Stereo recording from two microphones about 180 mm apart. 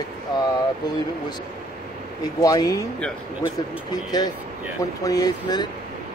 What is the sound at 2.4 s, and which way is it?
Speech, 20° left (ahead or behind).